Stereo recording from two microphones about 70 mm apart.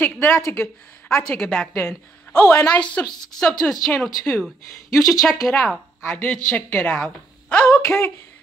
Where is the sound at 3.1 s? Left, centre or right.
Left.